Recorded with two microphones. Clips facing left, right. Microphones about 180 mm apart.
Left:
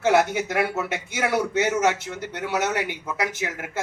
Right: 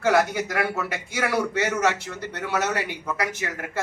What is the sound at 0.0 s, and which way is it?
A man's voice, 20° left (ahead or behind).